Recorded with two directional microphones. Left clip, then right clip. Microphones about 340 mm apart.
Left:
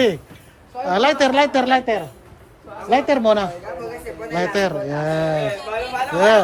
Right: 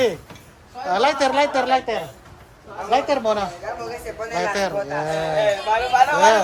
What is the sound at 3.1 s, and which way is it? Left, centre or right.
A man's voice, left.